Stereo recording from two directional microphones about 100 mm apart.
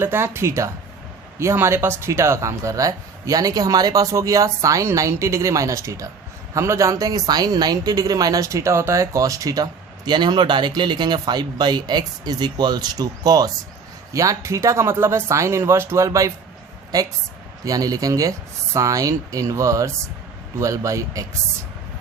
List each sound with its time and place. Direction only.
0.0 s speech: 25° right (ahead or behind)